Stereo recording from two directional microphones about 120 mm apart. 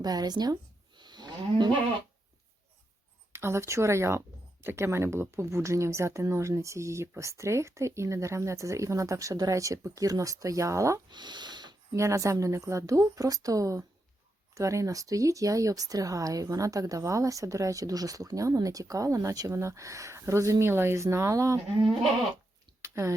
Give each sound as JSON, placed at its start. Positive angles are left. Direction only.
{"t": 0.0, "sound": "speech", "side_deg": -35}
{"t": 0.9, "sound": "cattle", "side_deg": -35}
{"t": 3.3, "sound": "speech", "side_deg": -20}
{"t": 11.1, "sound": "a sound", "side_deg": -40}
{"t": 11.9, "sound": "speech", "side_deg": -25}
{"t": 22.8, "sound": "a sound", "side_deg": -25}